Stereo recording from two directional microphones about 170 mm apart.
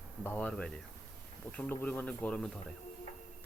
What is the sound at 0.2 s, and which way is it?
Speech, 10° left (ahead or behind).